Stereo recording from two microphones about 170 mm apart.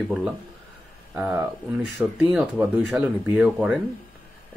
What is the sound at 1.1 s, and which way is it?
Speech, 10° right (ahead or behind).